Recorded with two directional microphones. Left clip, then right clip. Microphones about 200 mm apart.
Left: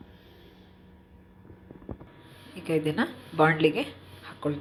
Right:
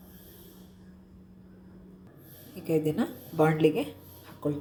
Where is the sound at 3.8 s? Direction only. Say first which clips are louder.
Left 1 dB; 15° right (ahead or behind).